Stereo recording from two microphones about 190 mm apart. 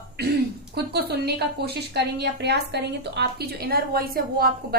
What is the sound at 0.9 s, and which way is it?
A woman's voice, 60° right (ahead or behind).